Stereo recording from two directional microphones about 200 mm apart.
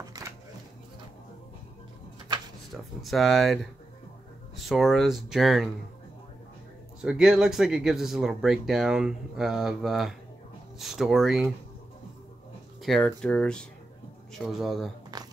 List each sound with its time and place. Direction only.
2.7 s speech: centre (ahead or behind)
4.6 s speech: centre (ahead or behind)
7.0 s speech: 5° right (ahead or behind)
12.8 s speech: 5° left (ahead or behind)
15.1 s a sound: 20° right (ahead or behind)